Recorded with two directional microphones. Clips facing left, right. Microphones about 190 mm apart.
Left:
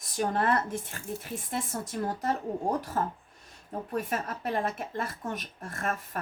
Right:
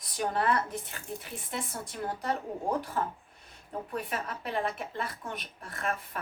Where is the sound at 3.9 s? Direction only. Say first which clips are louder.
Left 4 dB; 45° left (ahead or behind).